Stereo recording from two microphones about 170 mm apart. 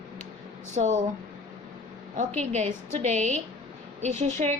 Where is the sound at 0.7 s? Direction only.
45° right (ahead or behind).